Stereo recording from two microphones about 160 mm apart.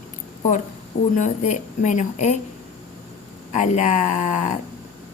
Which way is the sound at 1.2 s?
50° left (ahead or behind).